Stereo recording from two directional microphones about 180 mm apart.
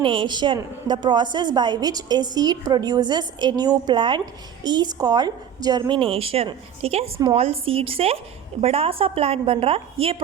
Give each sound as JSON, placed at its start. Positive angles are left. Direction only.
{"t": 0.0, "sound": "a woman's voice", "side_deg": -25}